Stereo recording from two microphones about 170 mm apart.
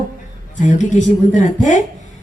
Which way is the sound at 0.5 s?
45° left (ahead or behind).